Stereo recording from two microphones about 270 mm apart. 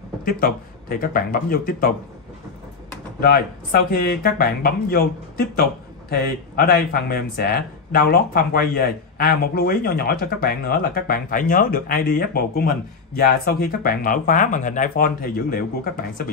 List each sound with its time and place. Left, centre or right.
0.2 s speech: left
3.2 s speech: left